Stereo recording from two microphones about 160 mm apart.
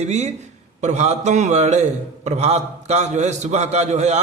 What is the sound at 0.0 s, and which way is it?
A man's voice, 45° right (ahead or behind).